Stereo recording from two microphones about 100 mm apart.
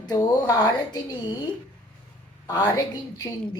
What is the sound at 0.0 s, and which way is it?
Speech, 45° left (ahead or behind).